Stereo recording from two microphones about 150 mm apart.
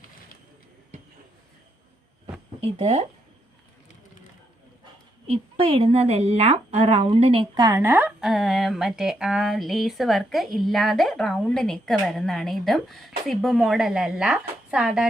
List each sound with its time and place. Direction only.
2.6 s a woman's voice: 45° right (ahead or behind)
5.3 s a woman's voice: 40° right (ahead or behind)
7.6 s speech: 20° right (ahead or behind)